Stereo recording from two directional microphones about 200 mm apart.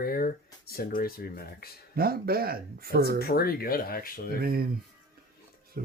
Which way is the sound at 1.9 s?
50° right (ahead or behind).